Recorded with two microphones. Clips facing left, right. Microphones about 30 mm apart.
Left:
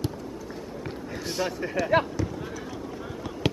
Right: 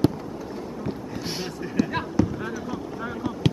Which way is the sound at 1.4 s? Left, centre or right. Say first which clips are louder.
Left 2 dB; centre.